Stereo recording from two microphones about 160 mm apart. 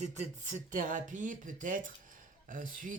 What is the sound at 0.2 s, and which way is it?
Speech, 50° right (ahead or behind).